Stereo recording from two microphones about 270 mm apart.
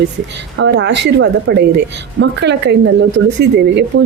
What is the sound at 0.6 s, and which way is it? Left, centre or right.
Speech, right.